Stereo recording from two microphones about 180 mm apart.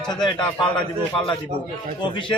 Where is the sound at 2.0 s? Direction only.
25° left (ahead or behind).